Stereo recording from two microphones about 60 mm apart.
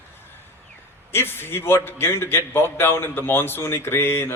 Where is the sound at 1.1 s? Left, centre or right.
Left.